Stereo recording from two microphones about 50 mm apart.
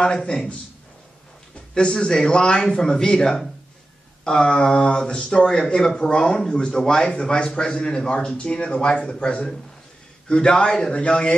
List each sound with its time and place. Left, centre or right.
0.0 s a man's voice: centre
1.8 s a man's voice: centre